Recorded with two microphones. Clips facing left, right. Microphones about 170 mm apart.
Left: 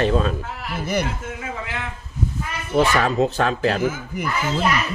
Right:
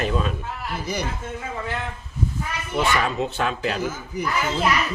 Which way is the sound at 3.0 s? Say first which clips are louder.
Left 5 dB; 40° left (ahead or behind).